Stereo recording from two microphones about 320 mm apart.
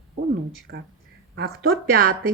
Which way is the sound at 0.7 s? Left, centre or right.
Right.